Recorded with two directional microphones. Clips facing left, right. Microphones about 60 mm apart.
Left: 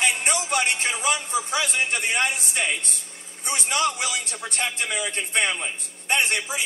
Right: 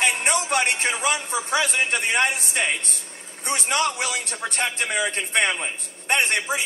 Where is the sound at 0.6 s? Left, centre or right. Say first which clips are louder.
Right 2 dB; right.